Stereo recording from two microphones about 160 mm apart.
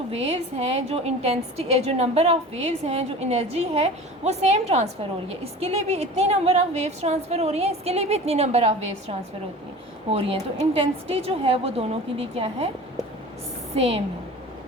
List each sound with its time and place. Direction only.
0.1 s a woman's voice: 40° right (ahead or behind)
13.7 s a woman's voice: 40° right (ahead or behind)